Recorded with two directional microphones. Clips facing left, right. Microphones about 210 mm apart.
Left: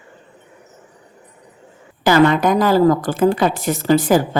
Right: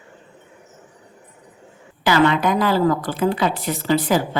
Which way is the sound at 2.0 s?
45° left (ahead or behind).